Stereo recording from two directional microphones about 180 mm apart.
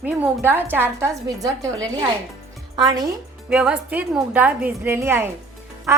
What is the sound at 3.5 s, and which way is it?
A woman's voice, 5° right (ahead or behind).